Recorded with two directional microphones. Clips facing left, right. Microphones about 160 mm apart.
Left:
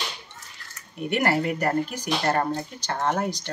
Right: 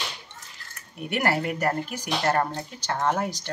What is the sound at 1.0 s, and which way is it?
A woman's voice, 5° right (ahead or behind).